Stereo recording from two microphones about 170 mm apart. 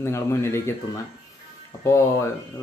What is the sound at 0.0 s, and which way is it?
Speech, 15° left (ahead or behind).